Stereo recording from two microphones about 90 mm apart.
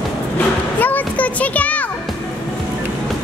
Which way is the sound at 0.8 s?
20° left (ahead or behind).